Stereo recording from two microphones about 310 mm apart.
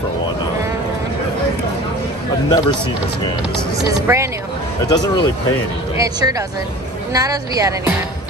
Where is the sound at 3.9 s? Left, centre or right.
Centre.